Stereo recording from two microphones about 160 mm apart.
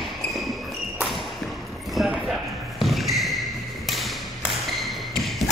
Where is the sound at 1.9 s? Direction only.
Centre (ahead or behind).